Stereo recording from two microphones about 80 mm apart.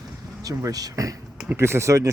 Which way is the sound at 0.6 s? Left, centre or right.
Right.